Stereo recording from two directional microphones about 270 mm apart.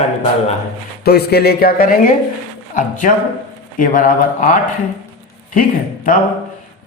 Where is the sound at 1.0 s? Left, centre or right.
Left.